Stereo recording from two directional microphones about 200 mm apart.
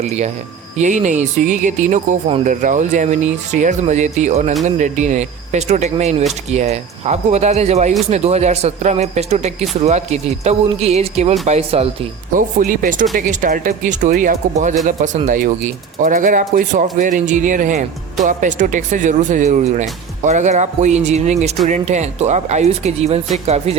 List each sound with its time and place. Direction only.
0.0 s speech: 35° right (ahead or behind)
12.3 s speech: 40° right (ahead or behind)